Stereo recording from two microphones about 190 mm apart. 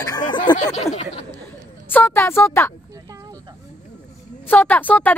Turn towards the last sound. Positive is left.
turn(degrees=10)  # may be behind; listen again after turning